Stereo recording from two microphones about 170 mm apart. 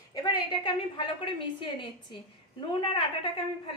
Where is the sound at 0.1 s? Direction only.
25° left (ahead or behind).